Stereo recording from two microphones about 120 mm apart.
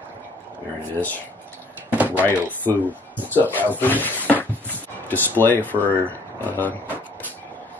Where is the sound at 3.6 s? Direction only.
15° left (ahead or behind).